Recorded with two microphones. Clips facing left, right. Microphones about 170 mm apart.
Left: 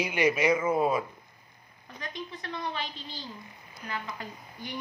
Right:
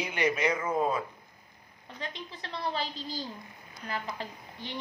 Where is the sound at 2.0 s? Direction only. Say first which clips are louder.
Left 2 dB; 25° right (ahead or behind).